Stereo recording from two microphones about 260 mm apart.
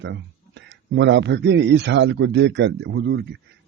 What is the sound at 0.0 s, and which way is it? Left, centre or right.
A man's voice, right.